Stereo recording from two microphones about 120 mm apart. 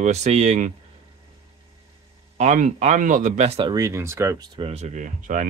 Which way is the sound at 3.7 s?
25° right (ahead or behind).